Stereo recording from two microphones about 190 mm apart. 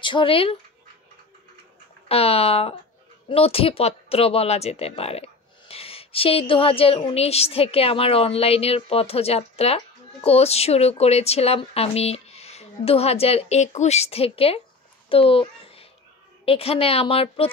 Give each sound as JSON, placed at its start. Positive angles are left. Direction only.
{"t": 0.0, "sound": "speech", "side_deg": 25}
{"t": 2.0, "sound": "speech", "side_deg": 30}
{"t": 15.0, "sound": "a sound", "side_deg": 30}
{"t": 16.4, "sound": "speech", "side_deg": 30}